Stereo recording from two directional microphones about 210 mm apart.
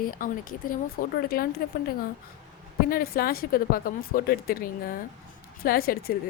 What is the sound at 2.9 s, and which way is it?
Speech, 45° left (ahead or behind).